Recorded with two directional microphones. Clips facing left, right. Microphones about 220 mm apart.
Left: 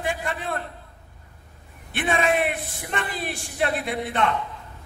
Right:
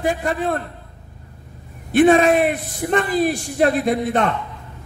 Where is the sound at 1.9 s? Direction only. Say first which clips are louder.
Right 10 dB; 40° right (ahead or behind).